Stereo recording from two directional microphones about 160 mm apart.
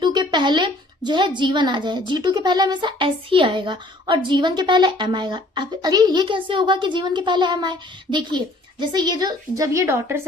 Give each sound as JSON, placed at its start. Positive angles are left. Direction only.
{"t": 0.0, "sound": "a woman's voice", "side_deg": -30}